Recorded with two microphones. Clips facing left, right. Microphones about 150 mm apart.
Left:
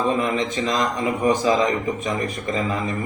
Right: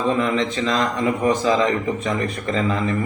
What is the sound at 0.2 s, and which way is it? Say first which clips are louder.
A man's voice: right 2 dB; 15° left (ahead or behind).